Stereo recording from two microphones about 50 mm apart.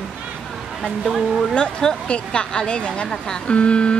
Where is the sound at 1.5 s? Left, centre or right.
Centre.